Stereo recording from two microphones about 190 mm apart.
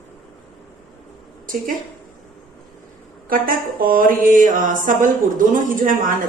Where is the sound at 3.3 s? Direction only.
50° right (ahead or behind).